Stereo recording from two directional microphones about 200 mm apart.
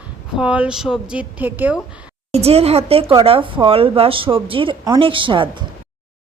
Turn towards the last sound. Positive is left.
turn(degrees=-25)  # may be behind; listen again after turning